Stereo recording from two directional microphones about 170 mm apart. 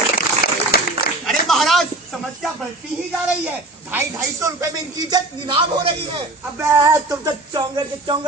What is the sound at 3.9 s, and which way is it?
Speech, 15° right (ahead or behind).